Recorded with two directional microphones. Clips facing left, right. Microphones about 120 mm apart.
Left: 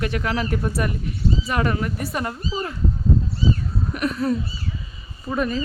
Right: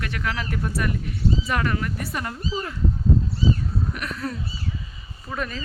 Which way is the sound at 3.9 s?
20° left (ahead or behind).